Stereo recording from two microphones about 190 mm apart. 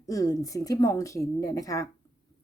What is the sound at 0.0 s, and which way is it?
Speech, 15° left (ahead or behind).